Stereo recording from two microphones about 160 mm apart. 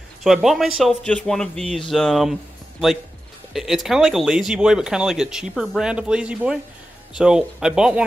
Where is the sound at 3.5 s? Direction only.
Centre (ahead or behind).